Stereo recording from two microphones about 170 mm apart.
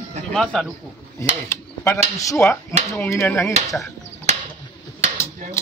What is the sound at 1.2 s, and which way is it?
A man's voice, 15° left (ahead or behind).